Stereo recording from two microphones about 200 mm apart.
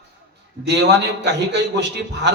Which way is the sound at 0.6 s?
60° right (ahead or behind).